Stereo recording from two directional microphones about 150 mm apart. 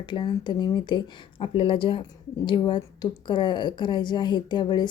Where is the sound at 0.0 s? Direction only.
30° left (ahead or behind).